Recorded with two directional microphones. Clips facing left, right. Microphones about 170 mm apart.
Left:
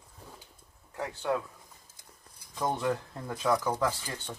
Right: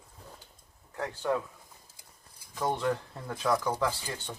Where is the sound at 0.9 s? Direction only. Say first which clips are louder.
Right 1 dB; 5° left (ahead or behind).